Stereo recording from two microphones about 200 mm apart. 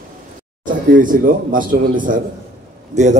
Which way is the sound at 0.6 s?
40° right (ahead or behind).